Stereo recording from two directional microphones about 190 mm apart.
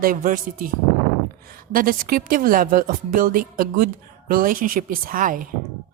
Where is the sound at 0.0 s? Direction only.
45° right (ahead or behind).